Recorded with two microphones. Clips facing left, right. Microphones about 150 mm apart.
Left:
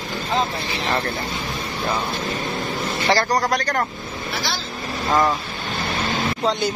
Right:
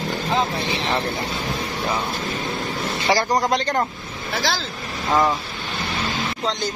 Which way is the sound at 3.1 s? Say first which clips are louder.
Even; 15° right (ahead or behind).